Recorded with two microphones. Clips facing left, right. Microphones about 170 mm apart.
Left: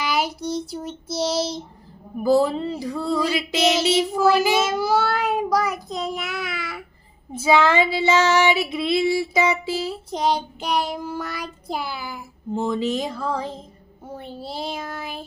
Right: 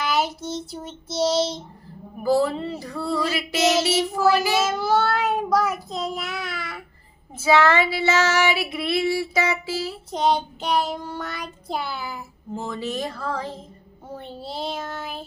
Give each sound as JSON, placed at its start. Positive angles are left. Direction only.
{"t": 0.0, "sound": "child singing", "side_deg": 0}
{"t": 2.2, "sound": "child singing", "side_deg": 20}
{"t": 4.6, "sound": "child singing", "side_deg": 0}
{"t": 7.3, "sound": "child singing", "side_deg": 15}
{"t": 10.1, "sound": "child singing", "side_deg": 0}
{"t": 12.5, "sound": "child singing", "side_deg": 15}
{"t": 14.1, "sound": "child singing", "side_deg": 0}